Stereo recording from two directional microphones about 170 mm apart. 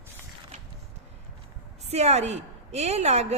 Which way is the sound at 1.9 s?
40° right (ahead or behind).